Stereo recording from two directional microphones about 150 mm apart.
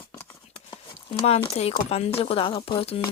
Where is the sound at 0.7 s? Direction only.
35° left (ahead or behind).